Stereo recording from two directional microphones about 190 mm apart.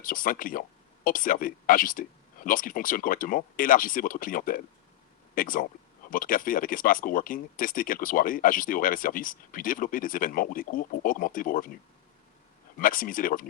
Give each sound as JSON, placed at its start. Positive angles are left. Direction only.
{"t": 0.0, "sound": "speech", "side_deg": 45}
{"t": 12.8, "sound": "speech", "side_deg": 45}